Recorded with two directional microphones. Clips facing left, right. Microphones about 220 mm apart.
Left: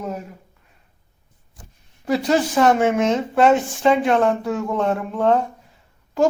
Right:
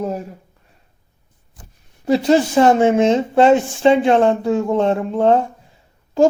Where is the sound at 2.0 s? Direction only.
25° right (ahead or behind).